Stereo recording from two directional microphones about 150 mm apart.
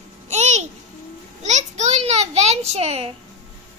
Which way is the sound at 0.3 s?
50° right (ahead or behind).